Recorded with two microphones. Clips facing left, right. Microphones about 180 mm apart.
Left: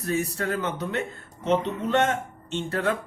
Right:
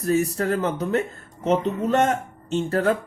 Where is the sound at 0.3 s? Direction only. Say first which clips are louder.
Right 5 dB; 40° right (ahead or behind).